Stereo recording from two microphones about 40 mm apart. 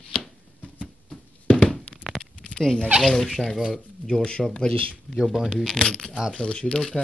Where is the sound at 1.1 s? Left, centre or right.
Left.